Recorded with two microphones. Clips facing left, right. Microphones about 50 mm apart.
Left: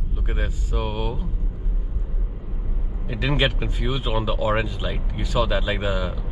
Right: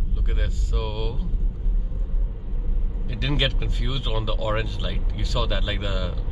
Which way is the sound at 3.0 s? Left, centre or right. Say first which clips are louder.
Left 3 dB; centre.